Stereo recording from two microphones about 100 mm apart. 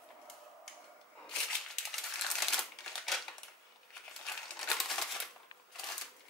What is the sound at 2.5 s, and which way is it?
Shuffling cards, 5° left (ahead or behind).